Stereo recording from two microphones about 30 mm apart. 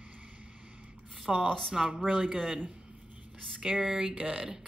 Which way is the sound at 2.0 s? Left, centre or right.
Right.